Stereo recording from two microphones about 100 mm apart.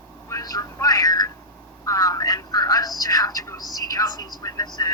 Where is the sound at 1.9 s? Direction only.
35° left (ahead or behind).